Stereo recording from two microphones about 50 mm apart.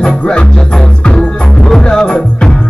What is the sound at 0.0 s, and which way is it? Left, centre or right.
Music, centre.